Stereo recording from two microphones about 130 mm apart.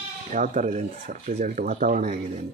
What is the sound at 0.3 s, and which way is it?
Speech, 75° right (ahead or behind).